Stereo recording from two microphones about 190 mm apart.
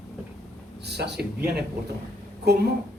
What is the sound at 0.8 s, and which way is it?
A man's voice, 60° right (ahead or behind).